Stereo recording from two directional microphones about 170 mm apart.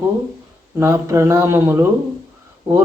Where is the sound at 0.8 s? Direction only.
20° right (ahead or behind).